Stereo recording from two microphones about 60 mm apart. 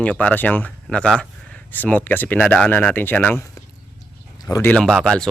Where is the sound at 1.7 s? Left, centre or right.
Left.